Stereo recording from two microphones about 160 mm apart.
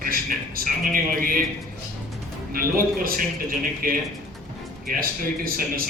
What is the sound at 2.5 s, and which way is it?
A man's voice, 65° right (ahead or behind).